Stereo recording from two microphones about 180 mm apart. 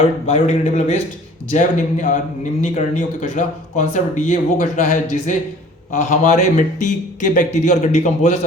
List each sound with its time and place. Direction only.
0.3 s a man's voice: 35° left (ahead or behind)